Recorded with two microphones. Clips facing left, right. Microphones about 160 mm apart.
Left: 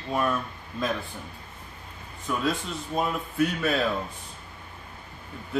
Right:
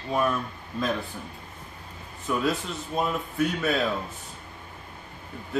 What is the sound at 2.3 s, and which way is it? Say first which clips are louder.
A man's voice: right 1 dB; centre (ahead or behind).